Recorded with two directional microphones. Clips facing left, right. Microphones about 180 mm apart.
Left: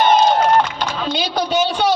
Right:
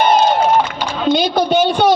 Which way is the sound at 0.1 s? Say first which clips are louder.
Right 1 dB; 5° right (ahead or behind).